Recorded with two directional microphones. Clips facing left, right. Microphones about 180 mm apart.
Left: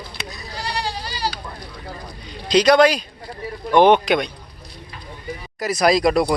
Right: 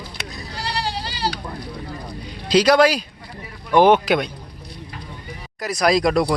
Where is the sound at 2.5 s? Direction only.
5° right (ahead or behind).